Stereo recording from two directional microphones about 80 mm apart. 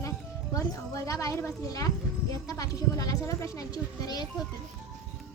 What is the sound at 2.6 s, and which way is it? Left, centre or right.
A woman's voice, left.